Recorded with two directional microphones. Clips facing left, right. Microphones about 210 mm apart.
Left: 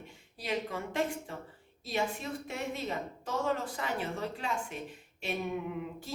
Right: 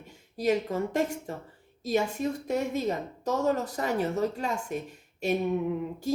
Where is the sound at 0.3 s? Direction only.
45° right (ahead or behind).